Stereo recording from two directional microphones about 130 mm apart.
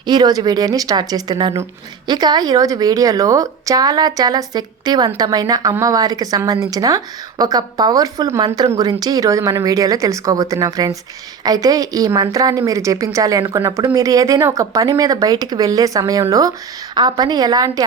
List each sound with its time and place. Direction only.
0.0 s a woman's voice: 30° right (ahead or behind)